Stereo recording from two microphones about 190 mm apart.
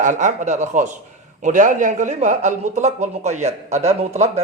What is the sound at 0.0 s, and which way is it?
A man's voice, 40° right (ahead or behind).